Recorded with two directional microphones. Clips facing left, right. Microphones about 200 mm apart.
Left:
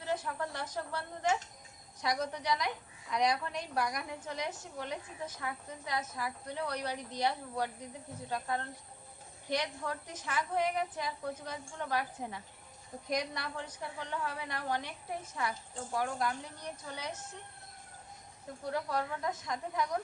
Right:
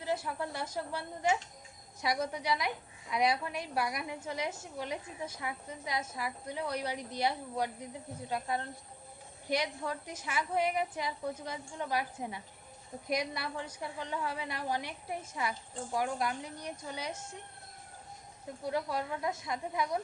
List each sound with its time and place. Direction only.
0.0 s a woman's voice: 10° right (ahead or behind)
18.6 s a woman's voice: 10° right (ahead or behind)